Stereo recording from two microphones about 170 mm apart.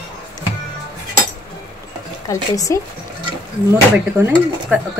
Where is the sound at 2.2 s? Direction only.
20° left (ahead or behind).